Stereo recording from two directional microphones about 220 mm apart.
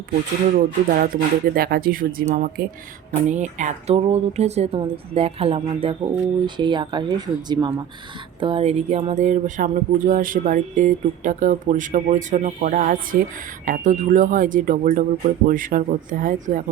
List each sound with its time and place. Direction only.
0.5 s speech: 40° right (ahead or behind)